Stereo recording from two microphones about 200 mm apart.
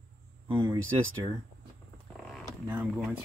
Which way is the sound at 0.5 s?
25° right (ahead or behind).